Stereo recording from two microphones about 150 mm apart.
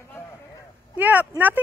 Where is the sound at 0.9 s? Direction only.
10° right (ahead or behind).